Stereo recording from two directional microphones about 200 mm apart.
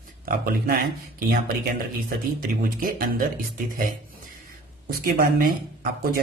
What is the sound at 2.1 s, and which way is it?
Speech, 45° right (ahead or behind).